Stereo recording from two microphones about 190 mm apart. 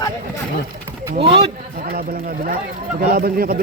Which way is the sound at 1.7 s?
50° right (ahead or behind).